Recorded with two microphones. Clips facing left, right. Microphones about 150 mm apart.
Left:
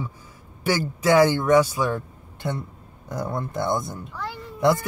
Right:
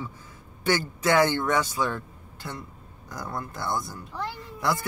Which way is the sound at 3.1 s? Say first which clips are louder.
Left 6 dB; 25° left (ahead or behind).